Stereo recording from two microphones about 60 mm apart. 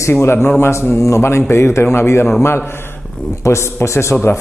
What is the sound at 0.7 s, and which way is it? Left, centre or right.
A man's voice, left.